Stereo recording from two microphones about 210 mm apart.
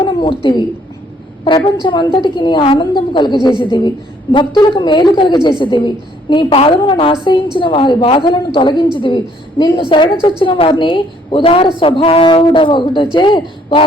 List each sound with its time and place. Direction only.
0.1 s a woman's voice: 25° left (ahead or behind)